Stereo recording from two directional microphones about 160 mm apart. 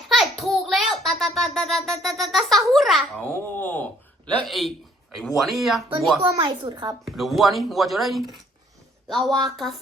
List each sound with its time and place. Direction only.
0.1 s a sound: centre (ahead or behind)
3.2 s babbling: 15° left (ahead or behind)
4.4 s speech: centre (ahead or behind)
6.2 s a woman's voice: 30° right (ahead or behind)
7.0 s speech: centre (ahead or behind)